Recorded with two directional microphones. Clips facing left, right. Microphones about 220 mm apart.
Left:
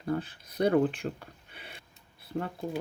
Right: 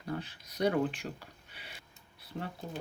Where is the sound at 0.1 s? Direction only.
50° left (ahead or behind).